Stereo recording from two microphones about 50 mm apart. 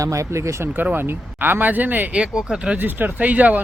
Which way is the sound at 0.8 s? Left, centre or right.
Right.